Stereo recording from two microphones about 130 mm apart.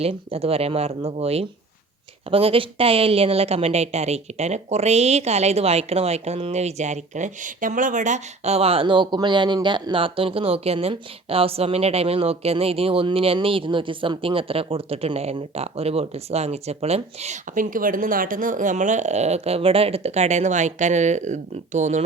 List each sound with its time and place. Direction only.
0.0 s a woman's voice: 50° right (ahead or behind); by 22.0 s 65° right (ahead or behind)